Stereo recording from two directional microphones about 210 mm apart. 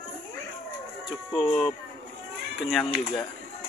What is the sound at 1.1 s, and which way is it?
Speech, centre (ahead or behind).